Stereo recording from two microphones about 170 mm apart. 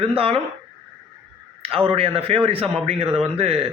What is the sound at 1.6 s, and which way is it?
A man's voice, 35° right (ahead or behind).